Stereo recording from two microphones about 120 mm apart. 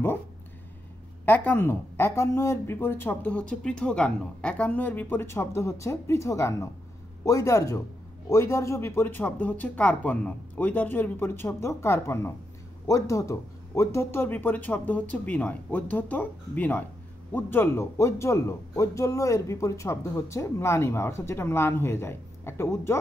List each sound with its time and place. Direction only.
1.2 s a man's voice: 15° left (ahead or behind)